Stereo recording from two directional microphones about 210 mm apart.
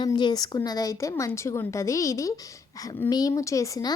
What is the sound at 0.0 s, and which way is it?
A woman's voice, 20° left (ahead or behind).